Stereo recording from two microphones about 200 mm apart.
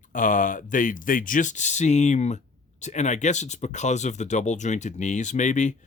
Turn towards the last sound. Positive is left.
turn(degrees=35)  # may be behind; listen again after turning